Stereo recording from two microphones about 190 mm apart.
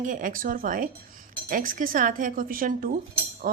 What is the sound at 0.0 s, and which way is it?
A woman's voice, 45° right (ahead or behind).